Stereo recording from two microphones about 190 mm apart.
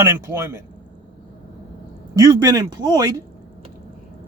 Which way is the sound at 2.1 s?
20° right (ahead or behind).